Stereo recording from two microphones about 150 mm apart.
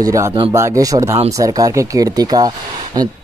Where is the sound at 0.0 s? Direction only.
20° right (ahead or behind).